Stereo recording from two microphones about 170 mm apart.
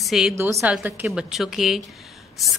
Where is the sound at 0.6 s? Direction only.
10° right (ahead or behind).